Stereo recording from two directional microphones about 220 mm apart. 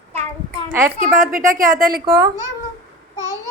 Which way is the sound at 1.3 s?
40° right (ahead or behind).